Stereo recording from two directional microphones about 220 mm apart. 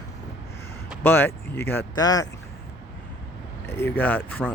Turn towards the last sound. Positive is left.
turn(degrees=10)  # may be behind; listen again after turning